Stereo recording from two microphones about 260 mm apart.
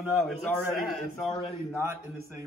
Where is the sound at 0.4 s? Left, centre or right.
Centre.